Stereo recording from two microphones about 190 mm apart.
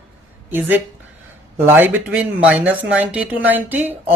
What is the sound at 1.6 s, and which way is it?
Speech, 10° right (ahead or behind).